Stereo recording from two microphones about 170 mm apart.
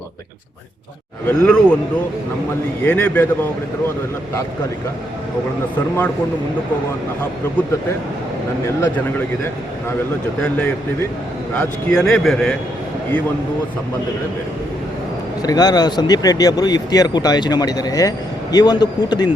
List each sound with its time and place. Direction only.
1.3 s a man's voice: 5° left (ahead or behind)
2.8 s speech: 10° left (ahead or behind)
10.4 s a man's voice: 10° left (ahead or behind)
15.4 s speech: 20° left (ahead or behind)